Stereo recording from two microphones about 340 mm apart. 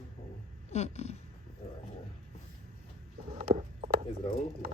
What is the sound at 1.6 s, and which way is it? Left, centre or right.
Roaring cats, centre.